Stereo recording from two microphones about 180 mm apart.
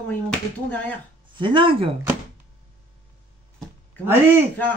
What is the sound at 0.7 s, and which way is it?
Speech, 10° left (ahead or behind).